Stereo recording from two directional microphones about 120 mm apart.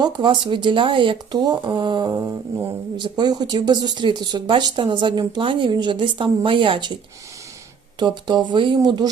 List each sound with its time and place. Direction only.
0.0 s speech: 40° right (ahead or behind)